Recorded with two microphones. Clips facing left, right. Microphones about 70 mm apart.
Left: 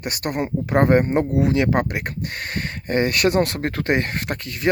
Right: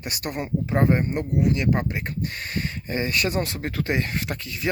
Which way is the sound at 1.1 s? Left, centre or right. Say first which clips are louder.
Left 5 dB; left.